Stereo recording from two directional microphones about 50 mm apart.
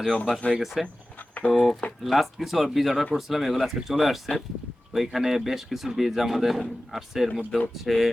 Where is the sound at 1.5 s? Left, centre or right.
Centre.